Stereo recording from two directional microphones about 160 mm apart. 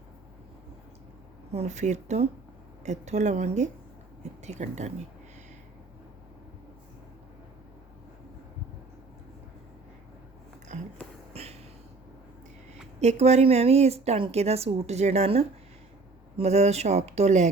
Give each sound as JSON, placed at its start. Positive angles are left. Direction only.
{"t": 1.5, "sound": "speech", "side_deg": -45}
{"t": 10.7, "sound": "a sound", "side_deg": -45}
{"t": 13.0, "sound": "a woman's voice", "side_deg": -45}